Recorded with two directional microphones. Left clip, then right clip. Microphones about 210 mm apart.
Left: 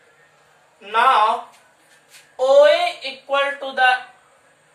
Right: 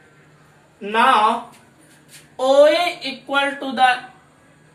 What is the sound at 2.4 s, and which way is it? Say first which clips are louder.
Speech: left 1 dB; 5° left (ahead or behind).